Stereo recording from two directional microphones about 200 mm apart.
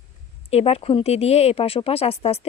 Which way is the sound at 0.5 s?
30° left (ahead or behind).